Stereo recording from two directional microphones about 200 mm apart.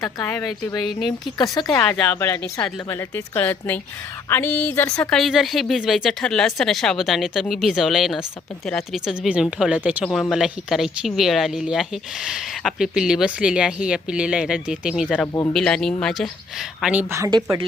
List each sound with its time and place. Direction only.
0.2 s a woman's voice: 10° left (ahead or behind)
0.9 s speech: centre (ahead or behind)
1.4 s a woman's voice: 20° left (ahead or behind); by 15.3 s centre (ahead or behind)
15.3 s a woman's voice: 15° left (ahead or behind)
15.5 s speech: 5° left (ahead or behind); by 17.7 s 20° right (ahead or behind)